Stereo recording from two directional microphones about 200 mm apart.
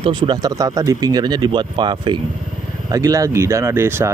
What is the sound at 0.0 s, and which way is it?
Speech, 25° right (ahead or behind).